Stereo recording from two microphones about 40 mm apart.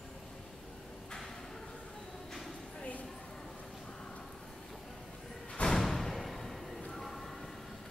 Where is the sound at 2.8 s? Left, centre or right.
Left.